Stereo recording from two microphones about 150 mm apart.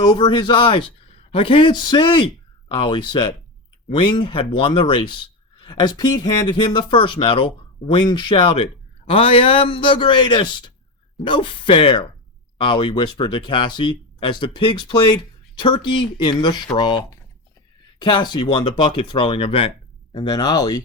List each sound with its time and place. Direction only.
0.0 s a man's voice: 30° left (ahead or behind)
20.3 s speech: 25° left (ahead or behind)